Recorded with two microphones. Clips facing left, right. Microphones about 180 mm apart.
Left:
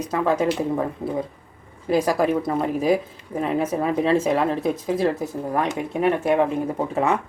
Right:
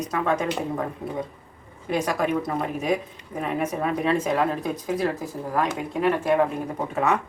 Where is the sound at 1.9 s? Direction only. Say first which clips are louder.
Left 4 dB; 35° left (ahead or behind).